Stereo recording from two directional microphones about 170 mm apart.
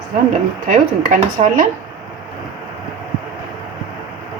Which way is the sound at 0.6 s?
50° right (ahead or behind).